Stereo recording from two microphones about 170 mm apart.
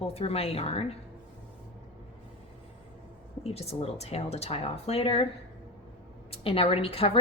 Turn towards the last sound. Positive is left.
turn(degrees=35)  # may be behind; listen again after turning